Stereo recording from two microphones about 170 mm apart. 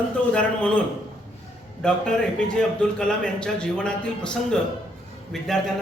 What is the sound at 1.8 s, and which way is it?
Speech, 5° left (ahead or behind).